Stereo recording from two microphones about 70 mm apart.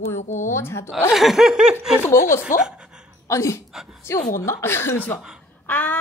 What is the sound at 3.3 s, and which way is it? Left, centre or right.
Speech, left.